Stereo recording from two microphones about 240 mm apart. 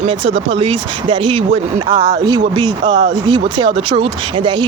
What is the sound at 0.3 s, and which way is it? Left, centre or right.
Speech, right.